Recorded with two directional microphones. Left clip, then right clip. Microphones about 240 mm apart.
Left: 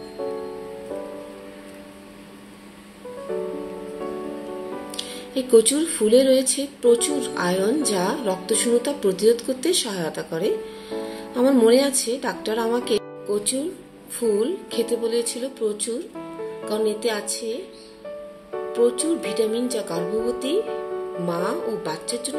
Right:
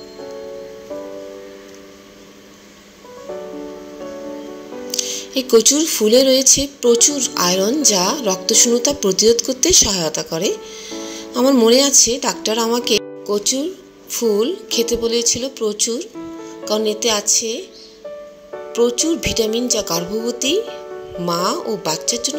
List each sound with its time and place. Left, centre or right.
4.9 s speech: right
18.7 s speech: right